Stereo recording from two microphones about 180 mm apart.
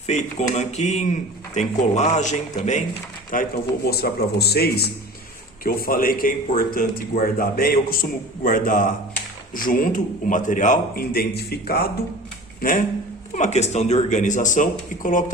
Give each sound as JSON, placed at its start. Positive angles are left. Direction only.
{"t": 0.5, "sound": "a man's voice", "side_deg": 40}
{"t": 3.3, "sound": "a man's voice", "side_deg": 60}
{"t": 13.3, "sound": "speech", "side_deg": 40}